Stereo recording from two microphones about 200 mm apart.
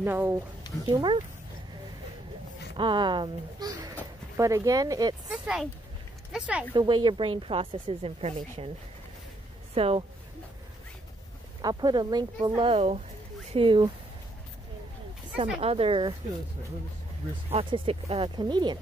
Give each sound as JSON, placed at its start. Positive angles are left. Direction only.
{"t": 0.0, "sound": "speech", "side_deg": -10}
{"t": 0.8, "sound": "speech", "side_deg": -20}
{"t": 2.8, "sound": "speech", "side_deg": -25}
{"t": 5.3, "sound": "speech", "side_deg": 0}
{"t": 6.7, "sound": "speech", "side_deg": -25}
{"t": 9.8, "sound": "speech", "side_deg": -30}
{"t": 11.6, "sound": "speech", "side_deg": -20}
{"t": 15.6, "sound": "speech", "side_deg": -30}
{"t": 17.5, "sound": "speech", "side_deg": -30}